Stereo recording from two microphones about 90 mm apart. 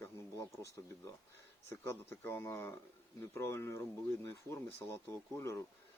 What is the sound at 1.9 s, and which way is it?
Speech, 25° left (ahead or behind).